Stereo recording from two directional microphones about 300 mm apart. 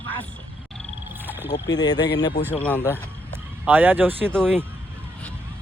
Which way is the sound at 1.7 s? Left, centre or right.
Centre.